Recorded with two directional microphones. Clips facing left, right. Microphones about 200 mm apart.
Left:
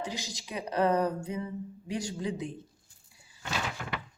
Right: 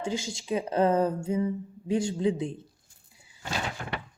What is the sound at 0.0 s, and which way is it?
A woman's voice, 25° right (ahead or behind).